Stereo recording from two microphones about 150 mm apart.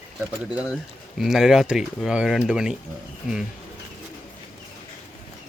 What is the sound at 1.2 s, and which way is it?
Speech, centre (ahead or behind).